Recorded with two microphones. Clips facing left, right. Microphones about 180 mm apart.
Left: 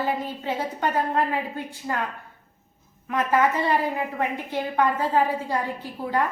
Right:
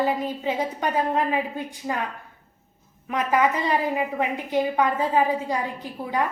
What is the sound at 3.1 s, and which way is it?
A woman's voice, 15° right (ahead or behind).